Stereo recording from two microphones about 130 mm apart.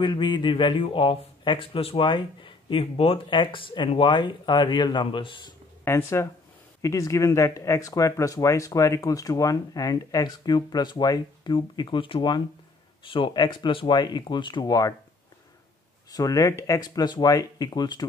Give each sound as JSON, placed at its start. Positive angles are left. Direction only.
{"t": 0.0, "sound": "a man's voice", "side_deg": 35}
{"t": 5.9, "sound": "a man's voice", "side_deg": 20}
{"t": 16.1, "sound": "speech", "side_deg": 30}